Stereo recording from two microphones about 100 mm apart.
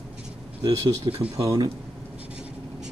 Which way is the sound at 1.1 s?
80° right.